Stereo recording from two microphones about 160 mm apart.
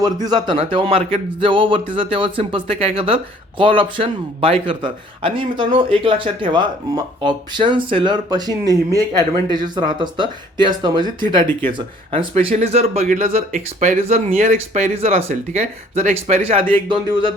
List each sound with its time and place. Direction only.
0.0 s speech: 25° right (ahead or behind)
0.4 s speech: 35° right (ahead or behind)